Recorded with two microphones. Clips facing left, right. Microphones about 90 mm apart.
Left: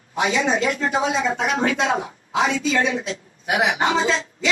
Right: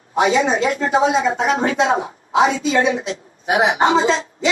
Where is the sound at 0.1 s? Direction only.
35° right (ahead or behind).